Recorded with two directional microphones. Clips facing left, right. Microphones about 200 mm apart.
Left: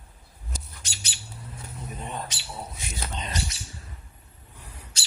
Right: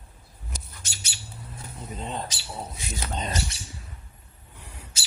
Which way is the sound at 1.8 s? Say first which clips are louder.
Right 2 dB; 20° right (ahead or behind).